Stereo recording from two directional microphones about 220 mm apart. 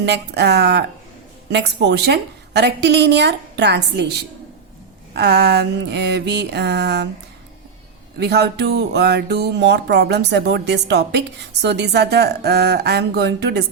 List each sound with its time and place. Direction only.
0.0 s music: 50° right (ahead or behind)
8.2 s music: 50° right (ahead or behind)